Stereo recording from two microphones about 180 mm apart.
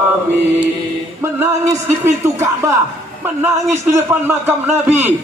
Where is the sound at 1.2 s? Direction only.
15° right (ahead or behind).